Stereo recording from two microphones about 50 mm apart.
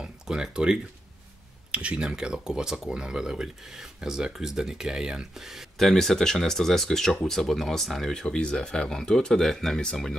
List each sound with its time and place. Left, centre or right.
0.0 s speech: centre
5.8 s speech: centre